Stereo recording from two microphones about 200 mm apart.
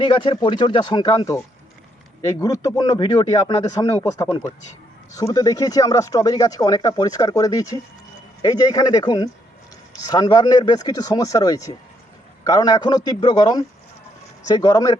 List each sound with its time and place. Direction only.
0.0 s speech: 25° left (ahead or behind)